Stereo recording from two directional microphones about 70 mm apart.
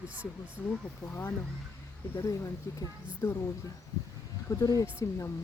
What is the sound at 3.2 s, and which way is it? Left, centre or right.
Speech, left.